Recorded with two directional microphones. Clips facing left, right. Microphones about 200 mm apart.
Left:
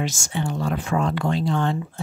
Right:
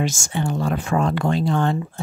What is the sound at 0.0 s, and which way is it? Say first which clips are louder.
Speech: right 3 dB; 50° right (ahead or behind).